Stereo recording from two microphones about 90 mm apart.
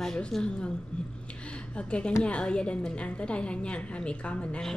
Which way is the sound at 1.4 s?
10° left (ahead or behind).